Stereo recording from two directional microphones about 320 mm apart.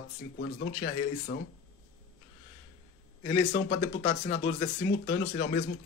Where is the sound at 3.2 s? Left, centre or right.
Left.